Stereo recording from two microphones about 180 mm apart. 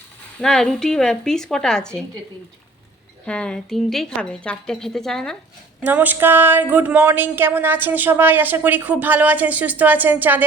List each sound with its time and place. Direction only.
0.4 s a woman's voice: centre (ahead or behind)
3.2 s a woman's voice: 5° left (ahead or behind)
5.8 s speech: 10° right (ahead or behind)